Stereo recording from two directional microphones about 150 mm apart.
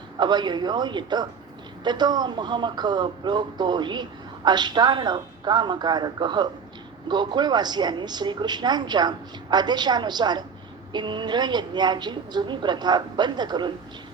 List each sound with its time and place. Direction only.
0.2 s speech: 30° right (ahead or behind)